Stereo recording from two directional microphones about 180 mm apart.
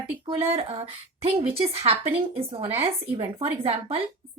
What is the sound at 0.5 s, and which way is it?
A woman's voice, 30° right (ahead or behind).